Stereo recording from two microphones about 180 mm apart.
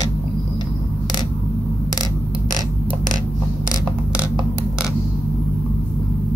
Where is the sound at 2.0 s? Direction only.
20° left (ahead or behind).